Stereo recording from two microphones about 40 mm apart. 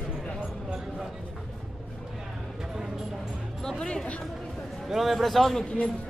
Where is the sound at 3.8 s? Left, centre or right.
Centre.